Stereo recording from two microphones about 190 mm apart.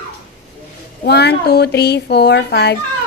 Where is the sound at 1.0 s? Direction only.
60° left (ahead or behind).